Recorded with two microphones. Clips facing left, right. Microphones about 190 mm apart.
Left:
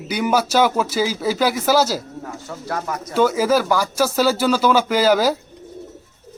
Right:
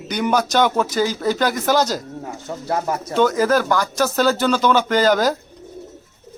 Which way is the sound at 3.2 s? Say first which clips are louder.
Even; 5° left (ahead or behind).